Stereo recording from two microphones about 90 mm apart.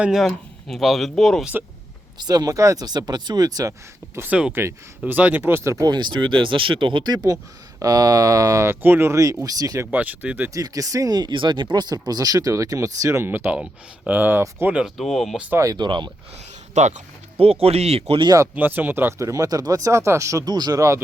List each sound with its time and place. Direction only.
0.0 s speech: 5° right (ahead or behind)
2.1 s speech: 50° right (ahead or behind)
4.2 s speech: 15° right (ahead or behind)
5.7 s speech: 50° right (ahead or behind)
8.6 s speech: 25° right (ahead or behind)
9.9 s speech: 20° right (ahead or behind)
10.5 s speech: 40° right (ahead or behind); by 14.8 s 15° right (ahead or behind)
14.8 s speech: centre (ahead or behind)
15.5 s speech: 40° right (ahead or behind)
15.8 s speech: 60° right (ahead or behind)
17.3 s speech: 90° right
18.5 s speech: 20° right (ahead or behind); by 21.0 s 35° right (ahead or behind)